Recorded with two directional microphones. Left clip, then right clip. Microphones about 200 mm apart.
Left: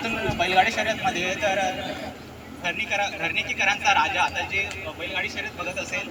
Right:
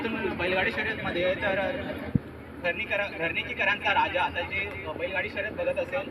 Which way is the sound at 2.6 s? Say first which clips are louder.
Left 3 dB; 35° left (ahead or behind).